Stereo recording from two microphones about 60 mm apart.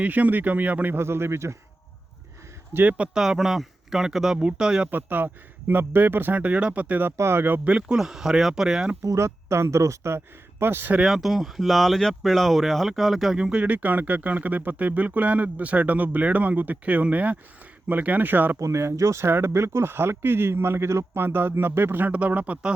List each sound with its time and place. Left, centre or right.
0.0 s speech: right
0.9 s speech: right
2.7 s speech: right
3.2 s speech: centre
4.9 s speech: right
7.2 s speech: right
7.6 s speech: centre
9.0 s speech: right
10.6 s speech: right
11.0 s speech: centre
13.3 s speech: centre
18.6 s speech: right